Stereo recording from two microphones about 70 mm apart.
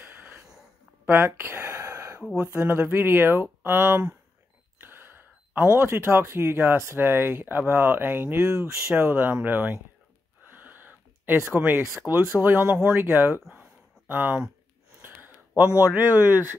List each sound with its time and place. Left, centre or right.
1.0 s speech: right
1.7 s a sound: right
2.3 s speech: right
2.9 s speech: right
5.5 s speech: right
5.8 s speech: right
8.9 s speech: right
10.5 s a sound: right
12.4 s speech: right
15.0 s a sound: right
15.9 s speech: right